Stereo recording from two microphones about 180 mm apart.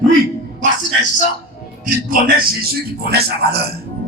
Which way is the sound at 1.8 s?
50° right (ahead or behind).